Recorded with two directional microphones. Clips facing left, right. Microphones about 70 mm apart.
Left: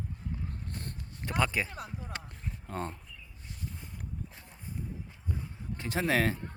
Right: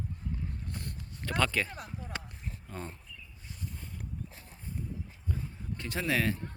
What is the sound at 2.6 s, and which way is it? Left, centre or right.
Speech, left.